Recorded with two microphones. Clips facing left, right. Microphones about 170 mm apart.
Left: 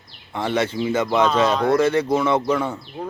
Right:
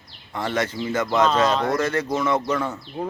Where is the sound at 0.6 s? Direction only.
25° left (ahead or behind).